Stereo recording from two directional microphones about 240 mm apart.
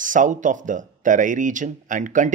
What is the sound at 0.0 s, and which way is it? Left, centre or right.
Speech, right.